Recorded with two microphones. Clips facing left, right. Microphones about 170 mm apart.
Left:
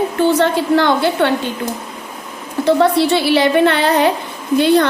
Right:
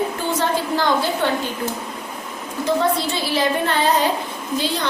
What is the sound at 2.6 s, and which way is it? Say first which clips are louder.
A woman's voice: left 7 dB; 70° left (ahead or behind).